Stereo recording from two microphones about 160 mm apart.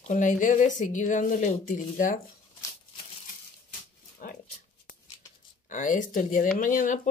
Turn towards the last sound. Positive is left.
turn(degrees=50)  # may be behind; listen again after turning